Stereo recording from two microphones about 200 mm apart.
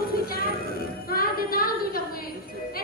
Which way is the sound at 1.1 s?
45° left (ahead or behind).